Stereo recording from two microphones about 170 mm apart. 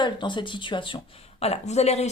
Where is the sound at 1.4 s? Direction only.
40° left (ahead or behind).